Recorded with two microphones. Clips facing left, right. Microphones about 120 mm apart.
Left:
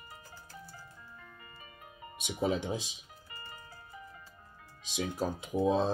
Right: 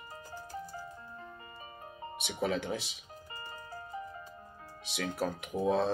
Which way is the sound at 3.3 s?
40° right (ahead or behind).